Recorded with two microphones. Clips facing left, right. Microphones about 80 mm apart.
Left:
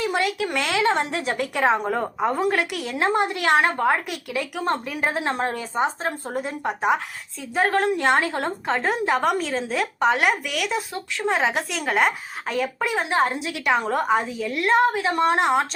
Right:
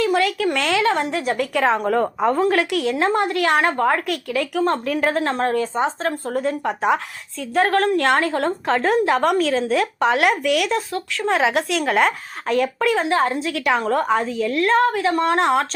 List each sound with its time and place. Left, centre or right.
0.0 s a sound: left
0.7 s speech: left
1.5 s a woman's voice: centre
6.8 s a woman's voice: centre
13.1 s a woman's voice: left
15.4 s a woman's voice: centre